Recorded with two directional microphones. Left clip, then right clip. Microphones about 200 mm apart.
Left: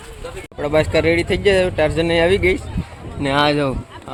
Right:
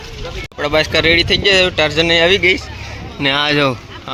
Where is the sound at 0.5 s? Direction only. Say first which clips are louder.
Right 2 dB; 5° left (ahead or behind).